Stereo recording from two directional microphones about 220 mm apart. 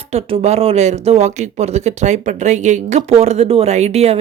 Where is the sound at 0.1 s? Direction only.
25° right (ahead or behind).